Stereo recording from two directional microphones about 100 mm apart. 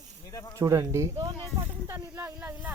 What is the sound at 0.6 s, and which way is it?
Speech, 30° right (ahead or behind).